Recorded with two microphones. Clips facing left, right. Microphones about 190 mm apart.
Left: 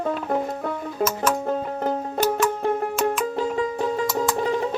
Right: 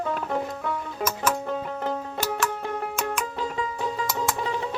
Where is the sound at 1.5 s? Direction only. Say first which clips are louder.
Left 4 dB; 45° left (ahead or behind).